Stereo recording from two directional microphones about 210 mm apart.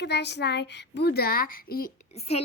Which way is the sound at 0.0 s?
55° left (ahead or behind).